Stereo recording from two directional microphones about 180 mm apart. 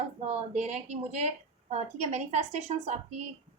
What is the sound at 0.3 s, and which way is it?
A woman's voice, 40° right (ahead or behind).